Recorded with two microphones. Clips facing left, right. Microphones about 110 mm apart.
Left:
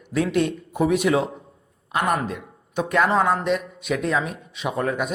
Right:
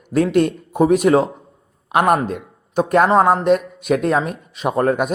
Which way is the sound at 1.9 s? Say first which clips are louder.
Right 7 dB; 55° right (ahead or behind).